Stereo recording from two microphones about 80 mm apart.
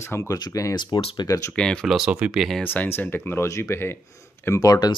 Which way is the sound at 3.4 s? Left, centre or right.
Left.